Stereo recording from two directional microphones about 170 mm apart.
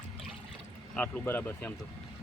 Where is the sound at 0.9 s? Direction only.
10° left (ahead or behind).